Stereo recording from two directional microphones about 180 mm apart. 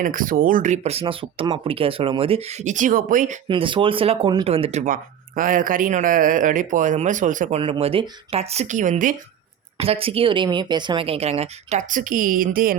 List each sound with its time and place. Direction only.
0.0 s speech: 50° right (ahead or behind); by 2.7 s 30° right (ahead or behind)
2.7 s a man's voice: 45° right (ahead or behind)
3.5 s speech: 30° right (ahead or behind)
5.4 s a man's voice: 50° right (ahead or behind)
7.6 s speech: 30° right (ahead or behind); by 9.1 s 45° right (ahead or behind)
9.7 s speech: 35° right (ahead or behind); by 12.7 s 50° right (ahead or behind)